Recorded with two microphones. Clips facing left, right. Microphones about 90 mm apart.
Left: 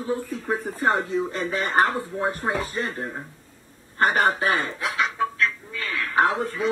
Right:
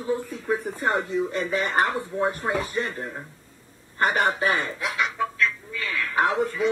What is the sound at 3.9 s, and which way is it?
Chicken, 35° left (ahead or behind).